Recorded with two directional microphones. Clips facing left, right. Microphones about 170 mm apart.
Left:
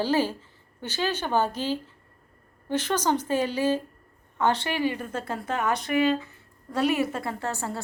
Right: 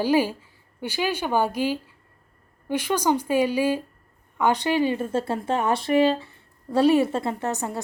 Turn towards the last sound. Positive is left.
turn(degrees=-20)  # may be behind; listen again after turning